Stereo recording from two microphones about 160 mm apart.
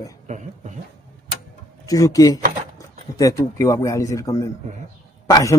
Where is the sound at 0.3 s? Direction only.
50° right (ahead or behind).